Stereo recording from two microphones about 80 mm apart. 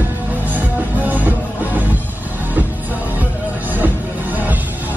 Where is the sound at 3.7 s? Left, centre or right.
Right.